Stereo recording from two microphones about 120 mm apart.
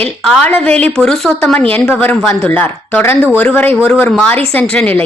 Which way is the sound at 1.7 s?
15° left (ahead or behind).